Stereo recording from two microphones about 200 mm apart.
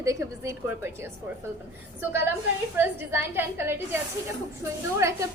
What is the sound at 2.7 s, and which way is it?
A woman's voice, 10° right (ahead or behind).